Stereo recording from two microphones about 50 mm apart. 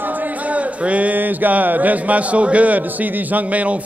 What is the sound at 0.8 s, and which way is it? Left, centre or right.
A man's voice, right.